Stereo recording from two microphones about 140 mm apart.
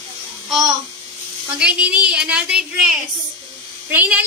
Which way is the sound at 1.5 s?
10° right (ahead or behind).